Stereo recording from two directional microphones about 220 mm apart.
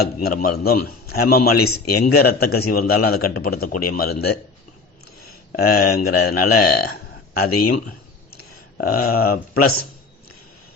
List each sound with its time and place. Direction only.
0.0 s a man's voice: 45° left (ahead or behind)
5.5 s a man's voice: 45° left (ahead or behind)